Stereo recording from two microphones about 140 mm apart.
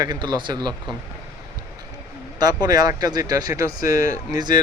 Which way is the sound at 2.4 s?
30° right (ahead or behind).